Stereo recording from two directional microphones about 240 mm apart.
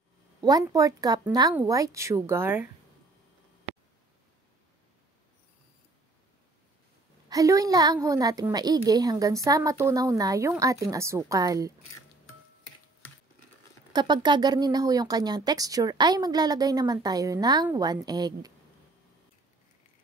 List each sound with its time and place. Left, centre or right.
0.4 s speech: centre
7.2 s speech: centre
13.9 s speech: centre